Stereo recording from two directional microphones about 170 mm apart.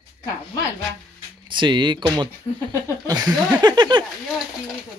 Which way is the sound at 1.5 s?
25° right (ahead or behind).